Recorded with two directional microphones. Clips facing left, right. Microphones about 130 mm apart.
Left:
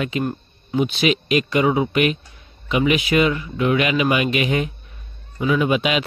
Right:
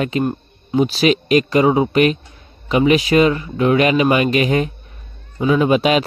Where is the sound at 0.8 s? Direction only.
40° right (ahead or behind).